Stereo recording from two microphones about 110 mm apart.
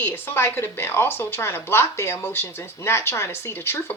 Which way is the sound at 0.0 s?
20° left (ahead or behind).